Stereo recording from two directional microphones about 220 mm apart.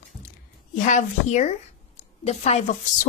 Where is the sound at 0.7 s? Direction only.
35° left (ahead or behind).